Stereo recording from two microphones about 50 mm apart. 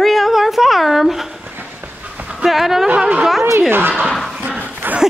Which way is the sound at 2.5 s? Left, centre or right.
Centre.